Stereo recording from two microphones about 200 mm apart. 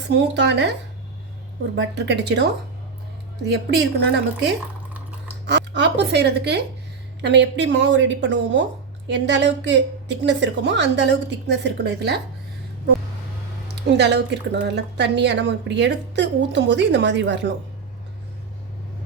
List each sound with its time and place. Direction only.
0.1 s a woman's voice: 60° right (ahead or behind)
3.5 s a woman's voice: 55° right (ahead or behind)
13.7 s a woman's voice: 60° right (ahead or behind)